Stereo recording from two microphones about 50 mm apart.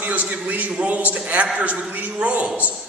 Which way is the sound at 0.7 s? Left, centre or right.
Right.